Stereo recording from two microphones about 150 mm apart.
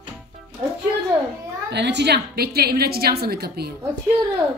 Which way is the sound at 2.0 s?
90° right.